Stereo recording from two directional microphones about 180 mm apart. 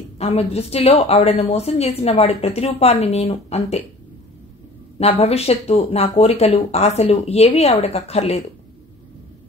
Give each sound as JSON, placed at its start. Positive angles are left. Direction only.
{"t": 0.2, "sound": "a woman's voice", "side_deg": 35}
{"t": 4.9, "sound": "a woman's voice", "side_deg": 35}